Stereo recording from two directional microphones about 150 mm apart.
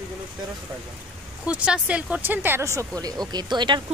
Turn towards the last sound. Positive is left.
turn(degrees=-30)  # may be behind; listen again after turning